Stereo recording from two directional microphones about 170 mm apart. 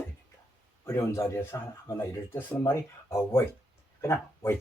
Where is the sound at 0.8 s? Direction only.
15° left (ahead or behind).